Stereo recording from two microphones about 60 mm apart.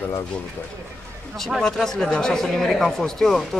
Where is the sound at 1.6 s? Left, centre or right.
Centre.